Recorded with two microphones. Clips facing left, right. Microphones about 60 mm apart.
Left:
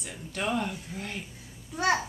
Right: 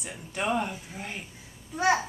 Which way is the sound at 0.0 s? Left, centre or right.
Centre.